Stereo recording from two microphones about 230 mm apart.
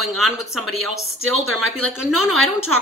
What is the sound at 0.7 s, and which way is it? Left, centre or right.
A woman's voice, right.